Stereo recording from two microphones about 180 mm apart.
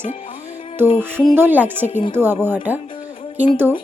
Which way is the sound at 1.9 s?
30° left (ahead or behind).